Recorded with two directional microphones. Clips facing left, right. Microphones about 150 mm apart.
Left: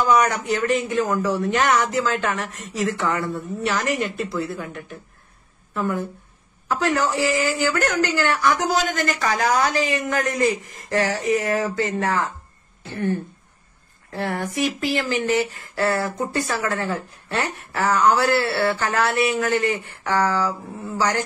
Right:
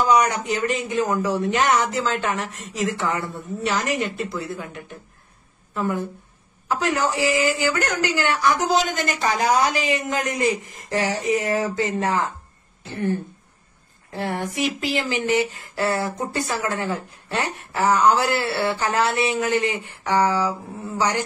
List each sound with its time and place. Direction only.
0.1 s speech: 20° right (ahead or behind)
14.1 s speech: 20° right (ahead or behind)